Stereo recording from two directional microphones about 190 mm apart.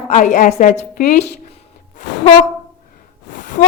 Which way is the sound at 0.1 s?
40° left (ahead or behind).